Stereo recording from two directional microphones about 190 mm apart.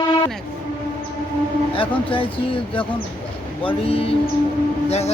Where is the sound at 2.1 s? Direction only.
30° left (ahead or behind).